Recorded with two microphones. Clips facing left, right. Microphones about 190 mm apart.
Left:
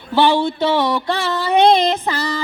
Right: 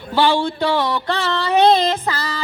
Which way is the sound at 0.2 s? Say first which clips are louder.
Left 2 dB; 15° left (ahead or behind).